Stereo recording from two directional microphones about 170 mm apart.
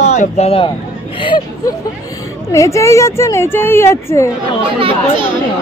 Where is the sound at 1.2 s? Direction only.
25° left (ahead or behind).